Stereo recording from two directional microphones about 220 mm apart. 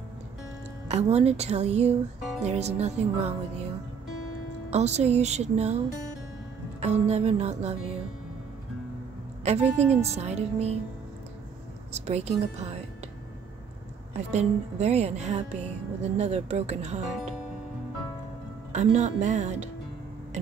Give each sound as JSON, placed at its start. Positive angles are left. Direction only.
{"t": 0.8, "sound": "speech", "side_deg": -30}
{"t": 4.6, "sound": "speech", "side_deg": -30}
{"t": 6.8, "sound": "speech", "side_deg": -30}
{"t": 9.4, "sound": "a woman's voice", "side_deg": -30}
{"t": 11.9, "sound": "speech", "side_deg": -30}
{"t": 14.1, "sound": "speech", "side_deg": -30}
{"t": 18.7, "sound": "speech", "side_deg": -30}